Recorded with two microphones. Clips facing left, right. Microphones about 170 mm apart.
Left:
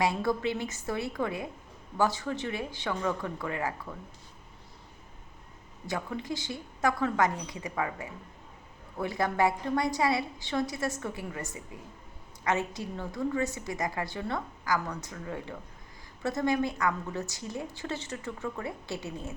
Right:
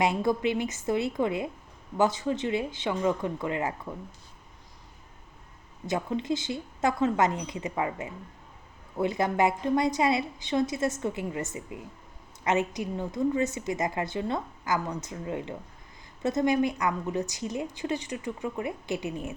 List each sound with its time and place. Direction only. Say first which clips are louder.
0.0 s a woman's voice: right 3 dB; 20° right (ahead or behind)
5.8 s a woman's voice: right 5 dB; 20° right (ahead or behind)